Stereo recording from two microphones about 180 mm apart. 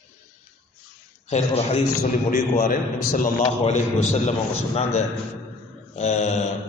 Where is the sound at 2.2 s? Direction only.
50° left (ahead or behind).